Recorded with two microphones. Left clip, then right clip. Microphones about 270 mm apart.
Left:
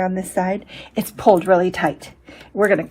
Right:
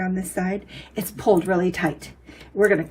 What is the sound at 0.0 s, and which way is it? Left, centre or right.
A woman's voice, left.